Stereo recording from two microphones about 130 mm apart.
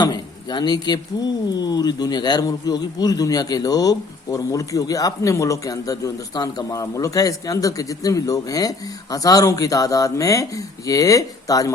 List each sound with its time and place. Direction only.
0.0 s a man's voice: 35° left (ahead or behind)